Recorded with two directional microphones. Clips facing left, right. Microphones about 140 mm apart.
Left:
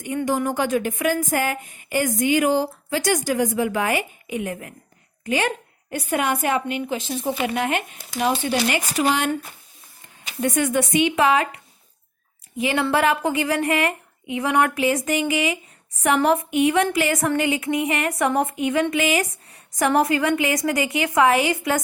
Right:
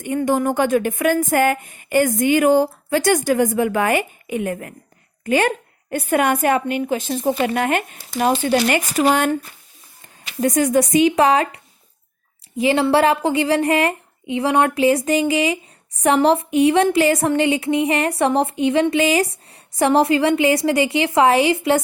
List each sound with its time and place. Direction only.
0.3 s speech: 55° right (ahead or behind)
10.4 s a woman's voice: 35° right (ahead or behind)